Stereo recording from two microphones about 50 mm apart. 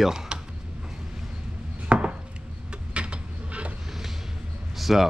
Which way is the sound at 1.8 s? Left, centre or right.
Right.